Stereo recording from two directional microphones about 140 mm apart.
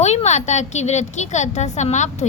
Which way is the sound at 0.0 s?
55° left (ahead or behind).